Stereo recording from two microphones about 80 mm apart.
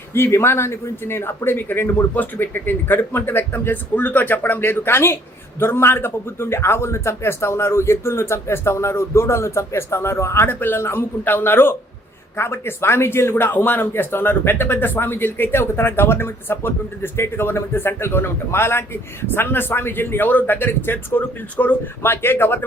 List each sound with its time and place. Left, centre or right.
0.1 s a man's voice: left